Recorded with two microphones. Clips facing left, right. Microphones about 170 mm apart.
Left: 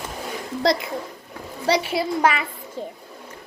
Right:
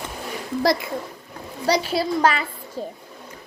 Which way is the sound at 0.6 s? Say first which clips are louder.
Even; 20° left (ahead or behind).